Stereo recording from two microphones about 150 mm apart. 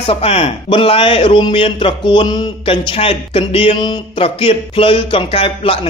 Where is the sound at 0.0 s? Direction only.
40° left (ahead or behind).